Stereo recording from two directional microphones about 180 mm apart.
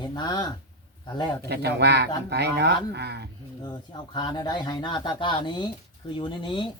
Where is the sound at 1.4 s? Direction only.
65° right (ahead or behind).